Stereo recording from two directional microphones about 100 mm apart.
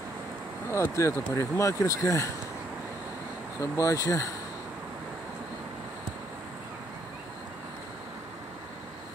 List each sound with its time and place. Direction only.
0.7 s speech: 30° left (ahead or behind)
3.7 s speech: 35° left (ahead or behind)